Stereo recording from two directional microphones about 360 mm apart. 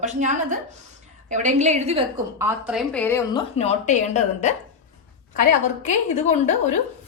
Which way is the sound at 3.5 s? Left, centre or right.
Centre.